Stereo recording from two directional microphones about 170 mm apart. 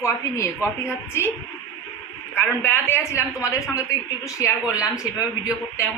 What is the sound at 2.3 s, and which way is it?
A woman's voice, 10° left (ahead or behind).